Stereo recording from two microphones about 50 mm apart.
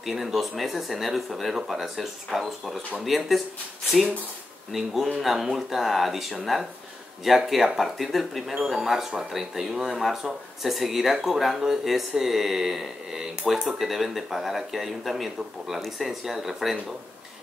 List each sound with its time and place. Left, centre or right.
0.0 s speech: centre
4.7 s speech: centre